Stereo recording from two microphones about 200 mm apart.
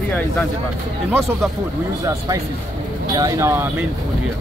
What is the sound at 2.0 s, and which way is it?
Speech, 20° right (ahead or behind).